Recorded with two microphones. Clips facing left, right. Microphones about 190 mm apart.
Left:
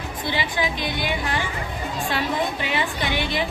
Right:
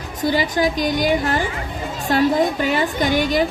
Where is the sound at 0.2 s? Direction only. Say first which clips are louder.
Right 8 dB; 40° right (ahead or behind).